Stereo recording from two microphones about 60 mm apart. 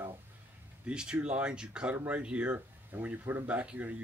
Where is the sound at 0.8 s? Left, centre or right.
Centre.